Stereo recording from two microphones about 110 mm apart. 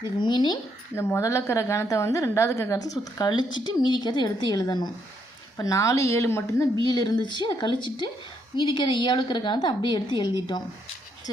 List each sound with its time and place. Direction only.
0.2 s a woman's voice: 45° left (ahead or behind)
0.9 s a woman's voice: 20° left (ahead or behind)
6.9 s a woman's voice: 40° left (ahead or behind)